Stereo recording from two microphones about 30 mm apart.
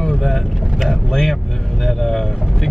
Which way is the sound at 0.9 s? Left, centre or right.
Centre.